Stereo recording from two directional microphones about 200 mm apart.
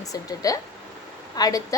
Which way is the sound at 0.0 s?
15° left (ahead or behind).